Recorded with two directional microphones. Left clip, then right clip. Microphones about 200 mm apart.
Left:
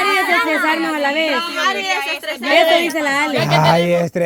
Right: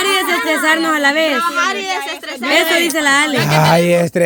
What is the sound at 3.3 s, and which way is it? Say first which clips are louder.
Speech: right 1 dB; 25° right (ahead or behind).